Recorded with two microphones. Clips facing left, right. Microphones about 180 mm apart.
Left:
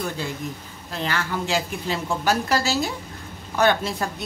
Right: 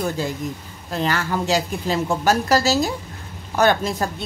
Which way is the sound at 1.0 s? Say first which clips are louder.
Right 4 dB; 40° right (ahead or behind).